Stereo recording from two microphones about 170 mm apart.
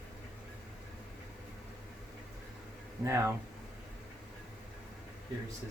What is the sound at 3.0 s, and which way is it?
Speech, 15° right (ahead or behind).